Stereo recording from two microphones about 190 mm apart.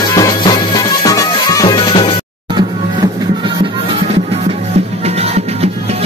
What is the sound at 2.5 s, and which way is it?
Music, 25° right (ahead or behind).